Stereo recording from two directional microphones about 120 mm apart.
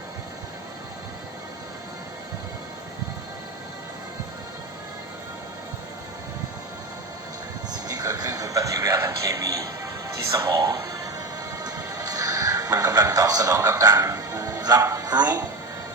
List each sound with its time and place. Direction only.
7.7 s a man's voice: 30° right (ahead or behind)
11.6 s music: 30° right (ahead or behind)